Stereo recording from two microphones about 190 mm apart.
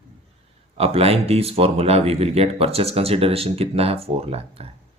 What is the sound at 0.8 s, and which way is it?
Speech, 30° right (ahead or behind).